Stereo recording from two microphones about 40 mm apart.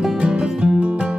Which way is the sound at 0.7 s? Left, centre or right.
Right.